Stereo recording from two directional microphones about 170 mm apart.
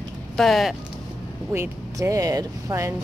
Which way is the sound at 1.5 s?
15° right (ahead or behind).